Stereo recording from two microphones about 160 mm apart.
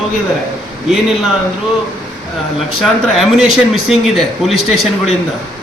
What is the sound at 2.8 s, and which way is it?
Speech, centre (ahead or behind).